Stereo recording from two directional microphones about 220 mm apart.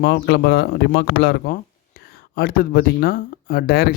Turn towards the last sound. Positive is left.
turn(degrees=45)  # may be behind; listen again after turning